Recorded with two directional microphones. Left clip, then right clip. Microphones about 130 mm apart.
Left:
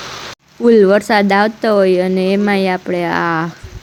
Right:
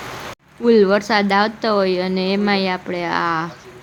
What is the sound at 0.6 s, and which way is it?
Speech, 30° left (ahead or behind).